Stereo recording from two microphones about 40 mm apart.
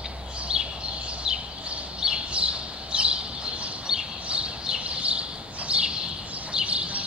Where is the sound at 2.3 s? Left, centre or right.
Right.